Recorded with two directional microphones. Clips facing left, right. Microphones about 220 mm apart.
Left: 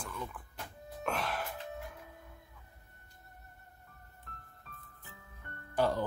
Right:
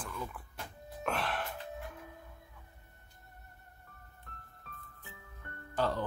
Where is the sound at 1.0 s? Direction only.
Centre (ahead or behind).